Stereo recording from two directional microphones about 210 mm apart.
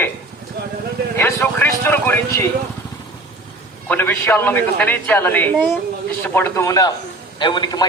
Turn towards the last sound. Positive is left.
turn(degrees=20)  # may be behind; listen again after turning